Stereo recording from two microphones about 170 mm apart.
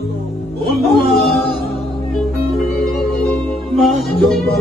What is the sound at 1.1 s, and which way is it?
A capella, 65° left (ahead or behind).